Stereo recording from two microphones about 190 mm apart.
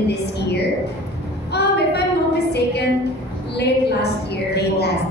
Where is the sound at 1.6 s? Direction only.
60° left (ahead or behind).